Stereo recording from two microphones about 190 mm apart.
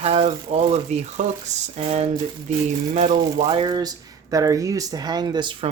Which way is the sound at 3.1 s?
25° right (ahead or behind).